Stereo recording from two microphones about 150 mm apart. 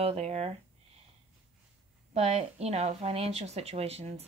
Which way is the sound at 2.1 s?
45° right (ahead or behind).